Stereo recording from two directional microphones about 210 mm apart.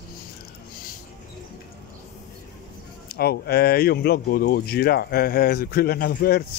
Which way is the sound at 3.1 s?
50° left (ahead or behind).